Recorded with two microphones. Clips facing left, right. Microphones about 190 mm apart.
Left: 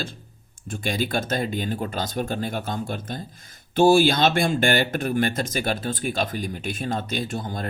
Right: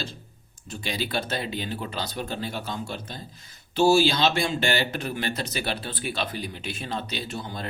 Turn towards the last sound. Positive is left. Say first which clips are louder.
# left 5 dB
turn(degrees=45)  # may be behind; listen again after turning